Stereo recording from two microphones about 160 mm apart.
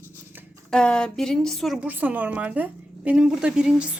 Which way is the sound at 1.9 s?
10° right (ahead or behind).